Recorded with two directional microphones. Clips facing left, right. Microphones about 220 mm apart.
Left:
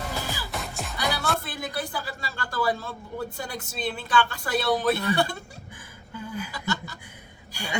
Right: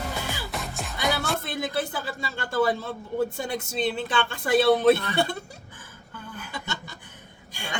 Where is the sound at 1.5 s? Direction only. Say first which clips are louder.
Right 4 dB; 20° right (ahead or behind).